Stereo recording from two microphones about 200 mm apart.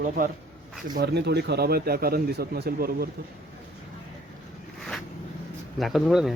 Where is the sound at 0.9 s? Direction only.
55° right (ahead or behind).